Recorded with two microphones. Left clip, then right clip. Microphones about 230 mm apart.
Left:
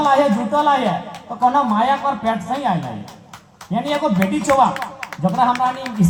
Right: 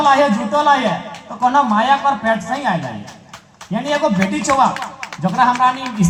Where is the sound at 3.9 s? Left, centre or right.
Left.